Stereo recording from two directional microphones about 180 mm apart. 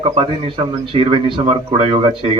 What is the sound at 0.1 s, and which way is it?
A man's voice, 30° right (ahead or behind).